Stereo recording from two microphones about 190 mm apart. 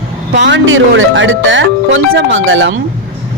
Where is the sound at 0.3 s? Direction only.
70° right (ahead or behind).